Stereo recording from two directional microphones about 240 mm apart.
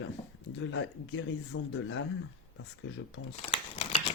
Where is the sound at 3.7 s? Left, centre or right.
Left.